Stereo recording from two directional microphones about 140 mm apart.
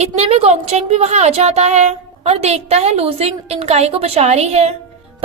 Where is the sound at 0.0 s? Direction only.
50° right (ahead or behind).